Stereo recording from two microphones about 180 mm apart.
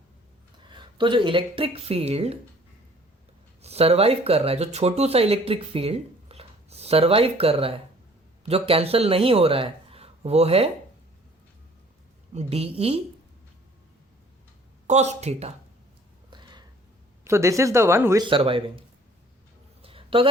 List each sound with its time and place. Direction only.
0.7 s speech: 25° right (ahead or behind)
3.6 s speech: 35° right (ahead or behind)
12.3 s speech: 35° right (ahead or behind)
14.8 s speech: 40° right (ahead or behind)
16.3 s a sound: 25° right (ahead or behind)
17.2 s speech: 15° right (ahead or behind)
18.3 s speech: 30° right (ahead or behind)
19.8 s a sound: 30° right (ahead or behind)